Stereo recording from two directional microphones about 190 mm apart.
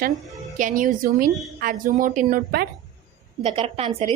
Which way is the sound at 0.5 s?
45° right (ahead or behind).